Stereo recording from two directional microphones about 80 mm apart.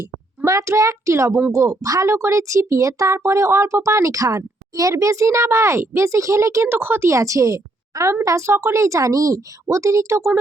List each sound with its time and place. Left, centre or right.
0.0 s a woman's voice: right
6.7 s speech: right
7.1 s a woman's voice: right